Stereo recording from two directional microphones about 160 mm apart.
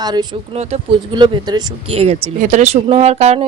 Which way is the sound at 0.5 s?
40° right (ahead or behind).